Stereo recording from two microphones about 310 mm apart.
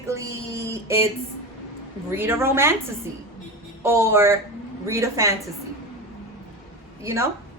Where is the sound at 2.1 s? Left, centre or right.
Centre.